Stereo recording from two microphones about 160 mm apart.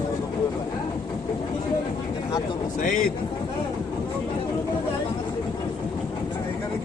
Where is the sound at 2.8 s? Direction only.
60° left (ahead or behind).